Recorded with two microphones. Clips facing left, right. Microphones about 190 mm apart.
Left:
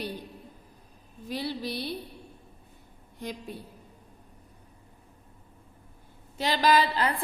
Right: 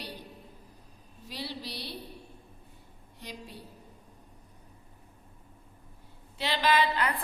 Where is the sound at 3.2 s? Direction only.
50° left (ahead or behind).